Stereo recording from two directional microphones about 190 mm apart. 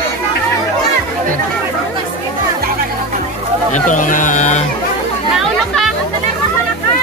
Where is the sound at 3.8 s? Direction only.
45° left (ahead or behind).